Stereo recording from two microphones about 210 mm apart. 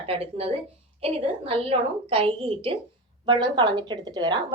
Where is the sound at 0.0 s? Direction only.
25° right (ahead or behind).